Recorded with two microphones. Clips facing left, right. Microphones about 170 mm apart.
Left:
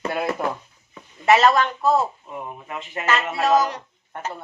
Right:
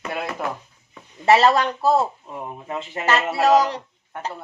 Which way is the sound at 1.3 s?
30° right (ahead or behind).